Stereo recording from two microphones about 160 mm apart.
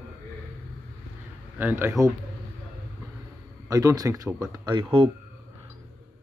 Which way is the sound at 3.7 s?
20° right (ahead or behind).